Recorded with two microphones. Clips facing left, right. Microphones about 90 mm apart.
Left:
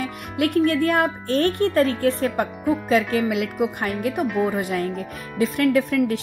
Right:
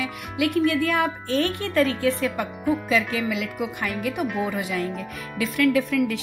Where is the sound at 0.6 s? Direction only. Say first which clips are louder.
Left 3 dB; 40° left (ahead or behind).